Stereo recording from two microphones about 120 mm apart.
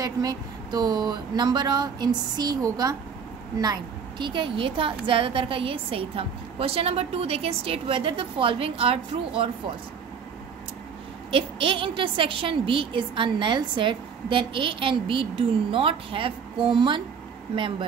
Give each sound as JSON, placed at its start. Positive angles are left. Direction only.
{"t": 0.0, "sound": "a woman's voice", "side_deg": -30}
{"t": 11.3, "sound": "a woman's voice", "side_deg": -45}